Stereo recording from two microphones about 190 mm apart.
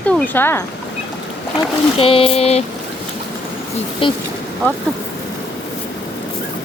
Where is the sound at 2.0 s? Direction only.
30° left (ahead or behind).